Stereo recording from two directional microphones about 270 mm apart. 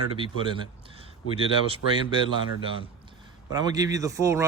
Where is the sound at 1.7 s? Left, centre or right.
Centre.